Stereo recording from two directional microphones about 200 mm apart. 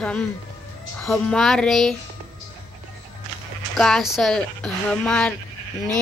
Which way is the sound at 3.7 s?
Centre (ahead or behind).